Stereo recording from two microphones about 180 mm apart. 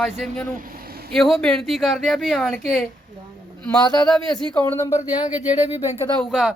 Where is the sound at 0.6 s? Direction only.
55° right (ahead or behind).